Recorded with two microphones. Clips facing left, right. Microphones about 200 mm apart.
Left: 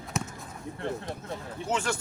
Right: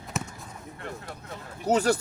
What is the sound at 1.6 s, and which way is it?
Speech, 40° right (ahead or behind).